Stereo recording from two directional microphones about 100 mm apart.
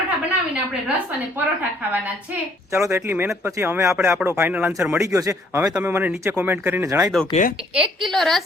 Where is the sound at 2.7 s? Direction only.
25° right (ahead or behind).